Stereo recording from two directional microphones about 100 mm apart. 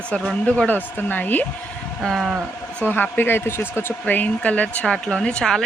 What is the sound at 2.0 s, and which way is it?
Speech, centre (ahead or behind).